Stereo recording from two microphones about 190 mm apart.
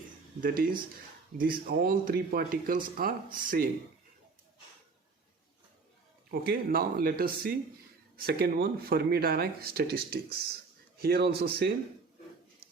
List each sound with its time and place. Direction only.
0.4 s speech: 50° right (ahead or behind)
6.3 s speech: 55° right (ahead or behind)